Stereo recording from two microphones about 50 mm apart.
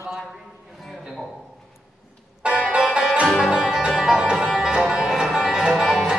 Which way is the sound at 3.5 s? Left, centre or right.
Centre.